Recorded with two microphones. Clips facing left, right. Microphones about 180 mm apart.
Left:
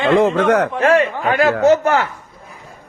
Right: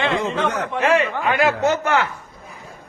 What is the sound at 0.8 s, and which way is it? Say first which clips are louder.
A man's voice: right 1 dB; 40° left (ahead or behind).